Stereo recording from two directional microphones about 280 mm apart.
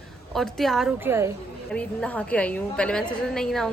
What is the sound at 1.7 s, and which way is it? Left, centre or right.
A woman's voice, centre.